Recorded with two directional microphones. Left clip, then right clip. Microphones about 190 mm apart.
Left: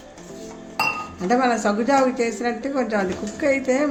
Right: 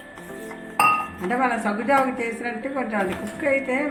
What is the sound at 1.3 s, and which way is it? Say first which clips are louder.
A woman's voice: left 4 dB; 70° left (ahead or behind).